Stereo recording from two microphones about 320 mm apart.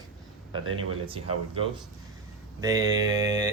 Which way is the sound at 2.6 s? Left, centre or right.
Centre.